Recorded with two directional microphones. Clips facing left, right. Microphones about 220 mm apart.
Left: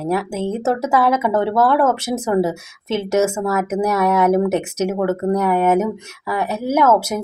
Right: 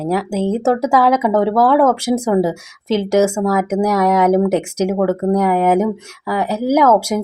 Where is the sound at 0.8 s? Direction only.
10° right (ahead or behind).